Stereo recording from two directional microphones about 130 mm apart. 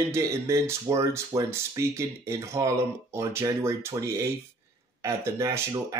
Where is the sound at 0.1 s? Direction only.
20° right (ahead or behind).